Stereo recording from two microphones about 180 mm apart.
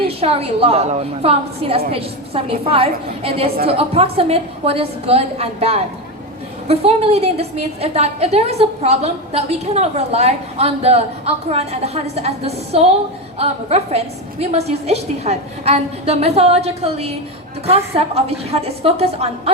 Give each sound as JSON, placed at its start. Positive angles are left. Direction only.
{"t": 0.2, "sound": "a woman's voice", "side_deg": -35}